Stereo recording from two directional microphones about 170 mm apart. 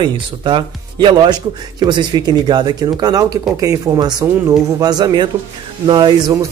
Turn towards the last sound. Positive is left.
turn(degrees=-25)  # may be behind; listen again after turning